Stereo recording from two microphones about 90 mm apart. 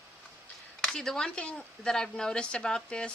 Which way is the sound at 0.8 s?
5° left (ahead or behind).